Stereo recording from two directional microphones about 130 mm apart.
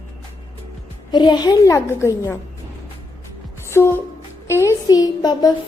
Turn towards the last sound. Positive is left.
turn(degrees=30)  # may be behind; listen again after turning